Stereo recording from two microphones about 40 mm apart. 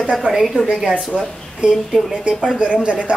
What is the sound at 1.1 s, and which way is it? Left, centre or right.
Speech, centre.